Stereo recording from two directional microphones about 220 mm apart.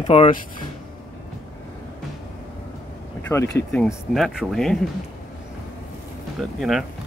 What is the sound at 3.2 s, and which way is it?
Speech, 10° left (ahead or behind).